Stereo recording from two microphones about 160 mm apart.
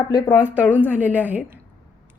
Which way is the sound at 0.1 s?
20° left (ahead or behind).